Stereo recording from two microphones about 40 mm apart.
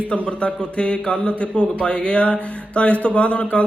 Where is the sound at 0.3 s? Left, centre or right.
Left.